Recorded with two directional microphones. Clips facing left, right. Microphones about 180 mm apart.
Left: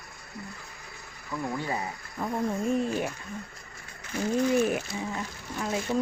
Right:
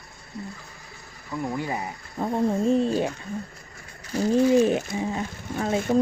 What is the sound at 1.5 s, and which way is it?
Speech, 20° right (ahead or behind).